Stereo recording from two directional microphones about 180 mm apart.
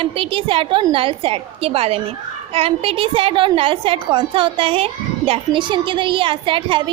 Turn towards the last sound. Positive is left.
turn(degrees=-30)  # may be behind; listen again after turning